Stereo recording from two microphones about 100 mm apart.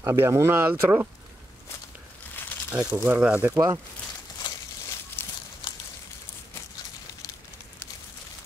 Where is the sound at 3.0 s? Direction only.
15° right (ahead or behind).